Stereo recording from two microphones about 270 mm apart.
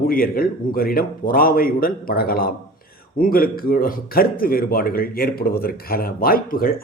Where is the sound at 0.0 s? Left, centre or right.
Left.